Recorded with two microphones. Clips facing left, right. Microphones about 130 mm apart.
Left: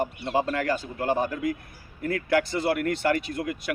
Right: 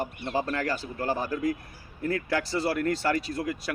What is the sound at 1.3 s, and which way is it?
Speech, 35° right (ahead or behind).